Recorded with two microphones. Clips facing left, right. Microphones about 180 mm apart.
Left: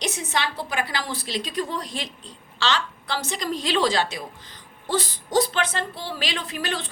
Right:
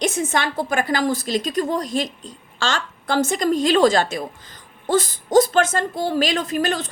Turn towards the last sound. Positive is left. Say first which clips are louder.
# right 8 dB
turn(degrees=-45)  # may be behind; listen again after turning